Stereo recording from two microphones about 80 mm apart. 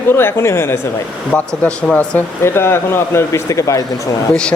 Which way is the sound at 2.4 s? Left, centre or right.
Left.